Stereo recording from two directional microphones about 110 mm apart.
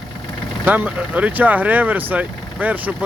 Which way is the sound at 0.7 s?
15° right (ahead or behind).